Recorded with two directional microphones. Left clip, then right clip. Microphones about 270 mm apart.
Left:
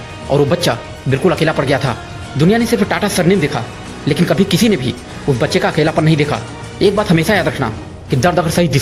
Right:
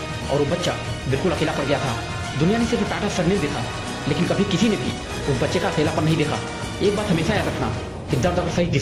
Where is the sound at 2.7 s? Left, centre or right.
Left.